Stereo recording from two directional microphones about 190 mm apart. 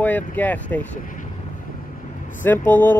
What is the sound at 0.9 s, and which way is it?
Vehicle, 45° left (ahead or behind).